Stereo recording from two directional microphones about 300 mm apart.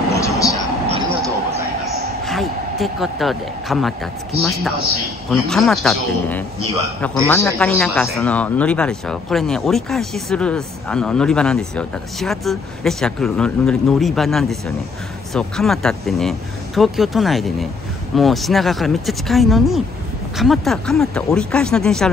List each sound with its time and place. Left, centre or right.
0.1 s vehicle: centre
0.8 s mouse: centre
2.2 s a man's voice: centre